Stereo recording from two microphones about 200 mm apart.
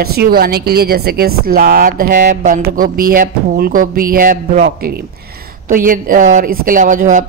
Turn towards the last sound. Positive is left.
turn(degrees=-40)  # may be behind; listen again after turning